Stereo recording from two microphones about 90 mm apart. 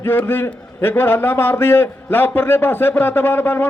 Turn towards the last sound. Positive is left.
turn(degrees=25)  # may be behind; listen again after turning